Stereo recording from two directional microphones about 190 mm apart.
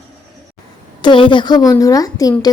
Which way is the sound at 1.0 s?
25° left (ahead or behind).